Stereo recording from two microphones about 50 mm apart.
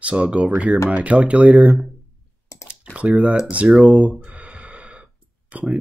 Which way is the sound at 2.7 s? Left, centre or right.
Right.